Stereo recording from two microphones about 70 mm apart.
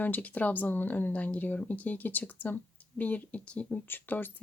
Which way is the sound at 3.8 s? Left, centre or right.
Left.